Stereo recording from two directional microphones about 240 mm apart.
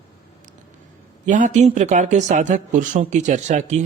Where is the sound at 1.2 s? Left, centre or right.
Right.